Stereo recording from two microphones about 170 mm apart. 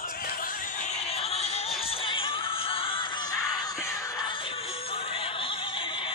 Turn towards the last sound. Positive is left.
turn(degrees=30)  # may be behind; listen again after turning